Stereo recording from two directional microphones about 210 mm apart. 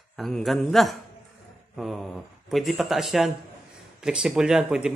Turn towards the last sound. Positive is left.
turn(degrees=-5)  # may be behind; listen again after turning